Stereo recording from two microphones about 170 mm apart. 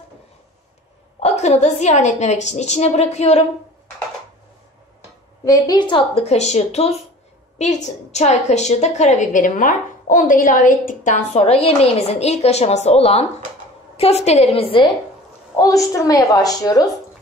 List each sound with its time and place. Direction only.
1.2 s a woman's voice: 40° left (ahead or behind)
5.4 s a woman's voice: 20° left (ahead or behind)
15.5 s a woman's voice: 20° left (ahead or behind)